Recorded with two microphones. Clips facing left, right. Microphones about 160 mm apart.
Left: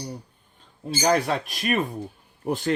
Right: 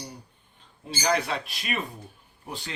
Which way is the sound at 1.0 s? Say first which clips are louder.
Left 4 dB; 40° left (ahead or behind).